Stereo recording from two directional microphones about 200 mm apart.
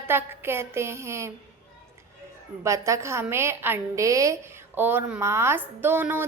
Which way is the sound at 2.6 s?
15° right (ahead or behind).